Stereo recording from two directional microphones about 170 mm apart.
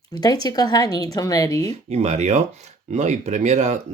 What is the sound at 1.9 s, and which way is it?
Speech, 40° right (ahead or behind).